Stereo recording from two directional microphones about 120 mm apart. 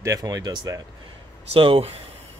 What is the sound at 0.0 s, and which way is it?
Speech, 30° right (ahead or behind).